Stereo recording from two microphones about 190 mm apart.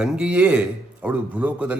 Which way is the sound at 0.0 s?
5° right (ahead or behind).